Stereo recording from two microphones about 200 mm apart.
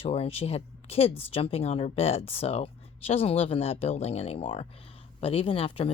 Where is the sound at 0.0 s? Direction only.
30° left (ahead or behind).